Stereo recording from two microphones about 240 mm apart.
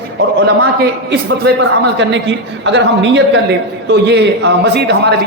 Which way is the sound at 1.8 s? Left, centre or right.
Right.